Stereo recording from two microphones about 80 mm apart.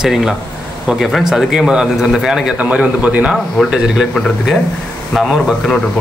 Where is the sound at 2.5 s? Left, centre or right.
Centre.